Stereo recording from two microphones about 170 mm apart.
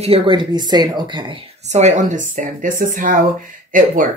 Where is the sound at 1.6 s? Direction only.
40° right (ahead or behind).